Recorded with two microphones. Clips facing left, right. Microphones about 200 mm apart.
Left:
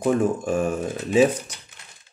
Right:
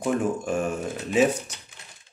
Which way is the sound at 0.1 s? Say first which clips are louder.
Left 2 dB; 35° left (ahead or behind).